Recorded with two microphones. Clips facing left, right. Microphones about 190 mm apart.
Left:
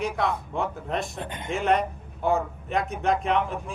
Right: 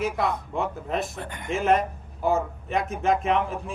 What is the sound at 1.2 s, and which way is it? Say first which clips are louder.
Speech: left 1 dB; 20° left (ahead or behind).